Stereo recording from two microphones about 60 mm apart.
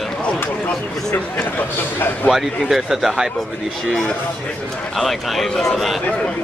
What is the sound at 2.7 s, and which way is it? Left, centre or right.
Speech, centre.